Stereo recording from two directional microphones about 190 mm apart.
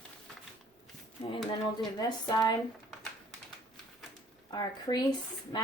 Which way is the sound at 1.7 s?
20° left (ahead or behind).